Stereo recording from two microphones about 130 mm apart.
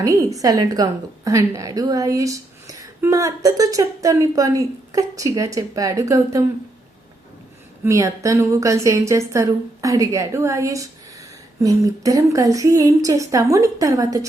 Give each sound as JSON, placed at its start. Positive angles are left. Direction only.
{"t": 0.0, "sound": "a woman's voice", "side_deg": -25}
{"t": 7.9, "sound": "a woman's voice", "side_deg": -25}